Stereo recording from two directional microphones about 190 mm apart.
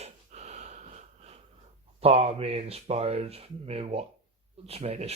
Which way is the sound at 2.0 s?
30° right (ahead or behind).